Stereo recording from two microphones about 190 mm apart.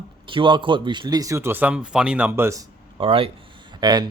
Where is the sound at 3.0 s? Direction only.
30° right (ahead or behind).